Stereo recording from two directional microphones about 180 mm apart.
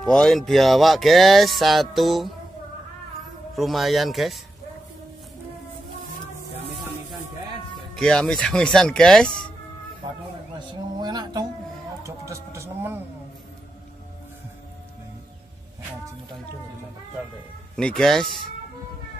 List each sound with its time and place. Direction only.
0.0 s music: 5° left (ahead or behind)
3.5 s music: centre (ahead or behind)
7.9 s music: 5° left (ahead or behind)
10.7 s a sound: 25° right (ahead or behind)
17.7 s music: 5° left (ahead or behind)